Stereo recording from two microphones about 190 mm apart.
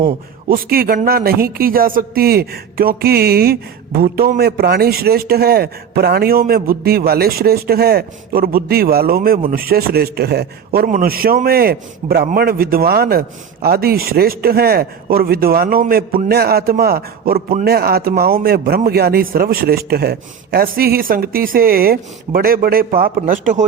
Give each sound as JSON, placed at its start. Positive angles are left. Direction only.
{"t": 0.0, "sound": "speech", "side_deg": -50}